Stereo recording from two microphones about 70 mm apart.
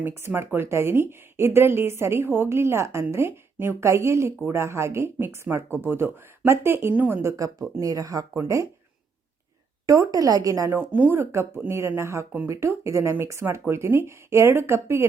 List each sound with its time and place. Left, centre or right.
0.0 s a woman's voice: right
9.8 s a woman's voice: right
10.1 s a woman's voice: right
10.7 s a woman's voice: right
11.2 s a woman's voice: right